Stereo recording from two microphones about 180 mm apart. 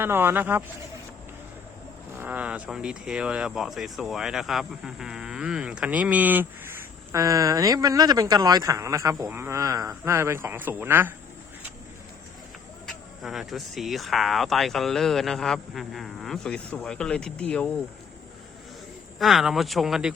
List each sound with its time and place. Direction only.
0.0 s speech: 10° right (ahead or behind)
2.1 s speech: 10° right (ahead or behind)
12.8 s speech: centre (ahead or behind)
19.2 s speech: centre (ahead or behind)